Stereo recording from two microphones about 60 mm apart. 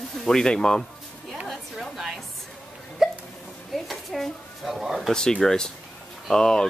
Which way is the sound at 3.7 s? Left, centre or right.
Centre.